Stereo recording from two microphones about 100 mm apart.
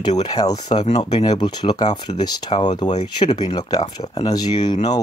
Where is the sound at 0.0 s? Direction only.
45° left (ahead or behind).